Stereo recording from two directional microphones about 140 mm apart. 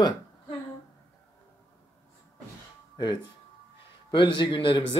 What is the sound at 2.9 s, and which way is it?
Speech, 30° left (ahead or behind).